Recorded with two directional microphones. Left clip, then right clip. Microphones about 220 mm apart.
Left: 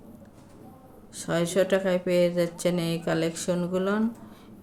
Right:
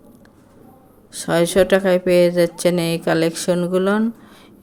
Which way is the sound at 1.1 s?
40° right (ahead or behind).